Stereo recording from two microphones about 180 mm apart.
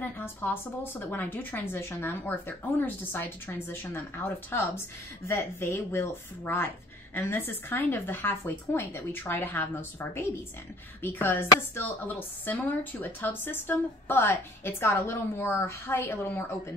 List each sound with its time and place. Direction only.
0.0 s a woman's voice: 10° left (ahead or behind)